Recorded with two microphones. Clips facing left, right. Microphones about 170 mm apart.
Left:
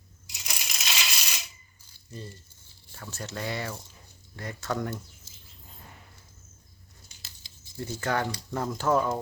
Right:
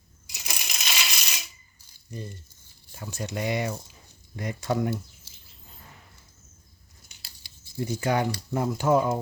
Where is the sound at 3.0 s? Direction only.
15° right (ahead or behind).